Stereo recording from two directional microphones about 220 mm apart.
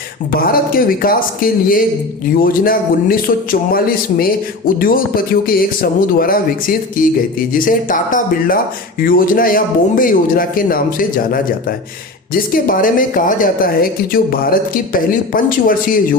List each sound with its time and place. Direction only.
0.3 s a man's voice: 40° left (ahead or behind)